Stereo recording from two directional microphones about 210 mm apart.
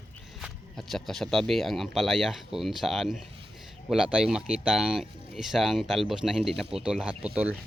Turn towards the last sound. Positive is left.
turn(degrees=-5)  # may be behind; listen again after turning